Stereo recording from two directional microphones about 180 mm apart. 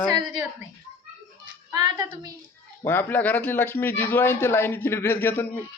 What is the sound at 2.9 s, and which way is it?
Speech, 10° left (ahead or behind).